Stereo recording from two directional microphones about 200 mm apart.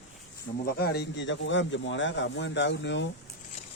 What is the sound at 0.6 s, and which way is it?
Speech, 50° left (ahead or behind).